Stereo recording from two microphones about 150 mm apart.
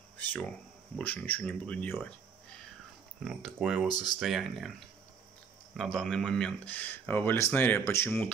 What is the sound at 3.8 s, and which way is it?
Speech, 25° left (ahead or behind).